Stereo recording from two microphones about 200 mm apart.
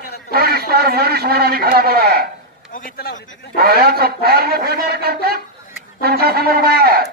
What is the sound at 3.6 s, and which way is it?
A man's voice, 50° right (ahead or behind).